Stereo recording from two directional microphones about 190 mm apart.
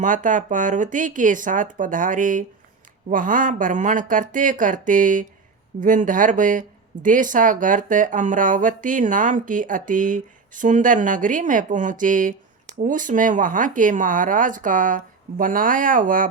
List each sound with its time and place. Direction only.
0.0 s speech: 40° right (ahead or behind)